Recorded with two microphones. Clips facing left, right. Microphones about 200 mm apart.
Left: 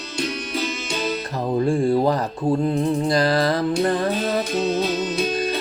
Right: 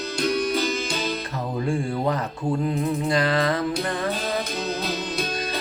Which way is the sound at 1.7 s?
35° left (ahead or behind).